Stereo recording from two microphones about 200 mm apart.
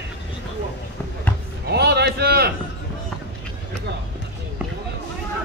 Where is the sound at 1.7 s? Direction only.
55° right (ahead or behind).